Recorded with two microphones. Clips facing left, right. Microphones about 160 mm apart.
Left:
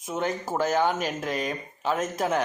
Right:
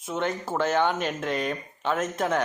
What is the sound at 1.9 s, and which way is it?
Speech, 35° left (ahead or behind).